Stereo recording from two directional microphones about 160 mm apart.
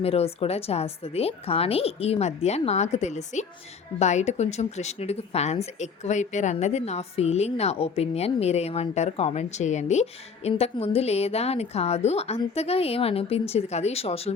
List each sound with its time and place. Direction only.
0.0 s a woman's voice: 40° left (ahead or behind)